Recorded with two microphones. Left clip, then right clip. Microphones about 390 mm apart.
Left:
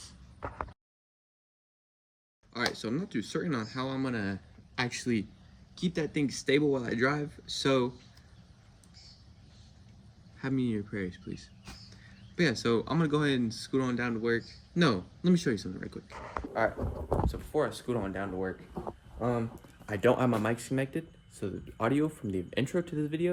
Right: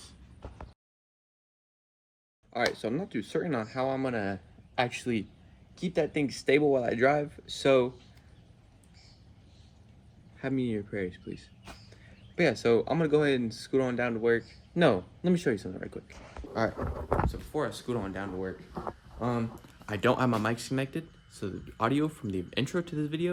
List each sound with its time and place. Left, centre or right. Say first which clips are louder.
2.5 s a man's voice: right 3 dB; centre
10.3 s speech: right 1 dB; centre
16.7 s speech: right 2 dB; centre
17.2 s speech: left 2 dB; centre
18.7 s speech: right 2 dB; centre
19.2 s speech: even; centre